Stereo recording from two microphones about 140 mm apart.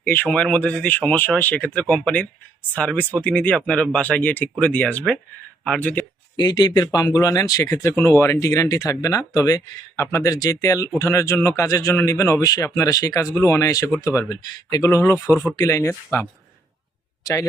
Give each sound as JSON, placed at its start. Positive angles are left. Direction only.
{"t": 0.1, "sound": "speech", "side_deg": 10}
{"t": 6.3, "sound": "speech", "side_deg": 30}